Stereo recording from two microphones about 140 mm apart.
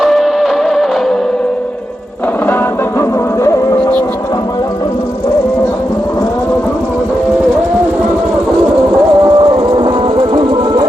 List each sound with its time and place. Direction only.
0.0 s music: centre (ahead or behind)
3.0 s music: 20° left (ahead or behind)
9.2 s music: 35° right (ahead or behind)